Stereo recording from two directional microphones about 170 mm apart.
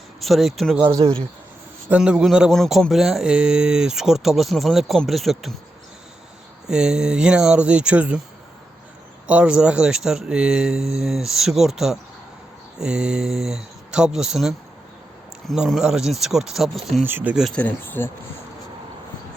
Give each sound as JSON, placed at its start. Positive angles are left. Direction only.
{"t": 0.2, "sound": "speech", "side_deg": 0}
{"t": 0.9, "sound": "speech", "side_deg": -15}
{"t": 1.9, "sound": "speech", "side_deg": -5}
{"t": 6.7, "sound": "speech", "side_deg": -5}
{"t": 9.2, "sound": "speech", "side_deg": -5}